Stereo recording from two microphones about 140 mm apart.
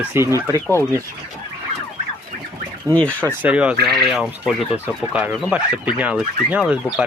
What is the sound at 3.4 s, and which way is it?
Speech, 10° right (ahead or behind).